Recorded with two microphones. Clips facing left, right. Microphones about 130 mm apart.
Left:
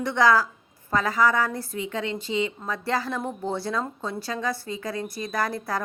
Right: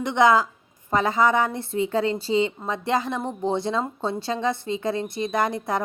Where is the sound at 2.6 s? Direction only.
20° right (ahead or behind).